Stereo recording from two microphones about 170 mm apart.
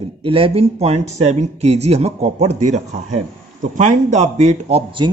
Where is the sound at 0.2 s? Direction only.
35° right (ahead or behind).